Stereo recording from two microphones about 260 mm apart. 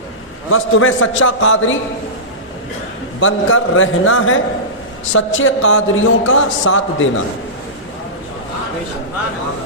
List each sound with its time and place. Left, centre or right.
0.5 s a man's voice: left
3.2 s a man's voice: left